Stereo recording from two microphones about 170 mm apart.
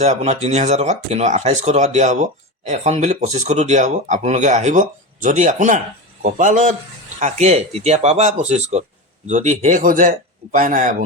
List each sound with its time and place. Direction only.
0.0 s speech: 40° right (ahead or behind)